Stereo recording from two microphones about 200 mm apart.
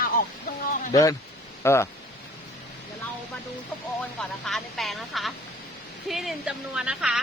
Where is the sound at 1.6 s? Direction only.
15° left (ahead or behind).